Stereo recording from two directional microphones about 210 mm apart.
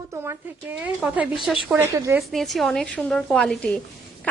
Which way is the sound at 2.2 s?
Centre (ahead or behind).